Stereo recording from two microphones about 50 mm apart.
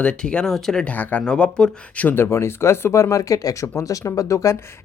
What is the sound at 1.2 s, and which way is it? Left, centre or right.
Speech, centre.